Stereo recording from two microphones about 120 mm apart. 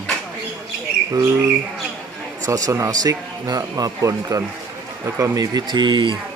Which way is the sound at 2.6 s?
30° right (ahead or behind).